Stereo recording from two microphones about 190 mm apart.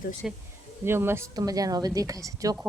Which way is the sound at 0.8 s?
15° right (ahead or behind).